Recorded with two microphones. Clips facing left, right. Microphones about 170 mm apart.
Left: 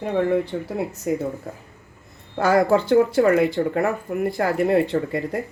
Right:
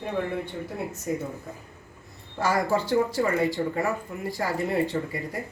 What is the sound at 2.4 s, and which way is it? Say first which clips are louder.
Speech: left 7 dB; 60° left (ahead or behind).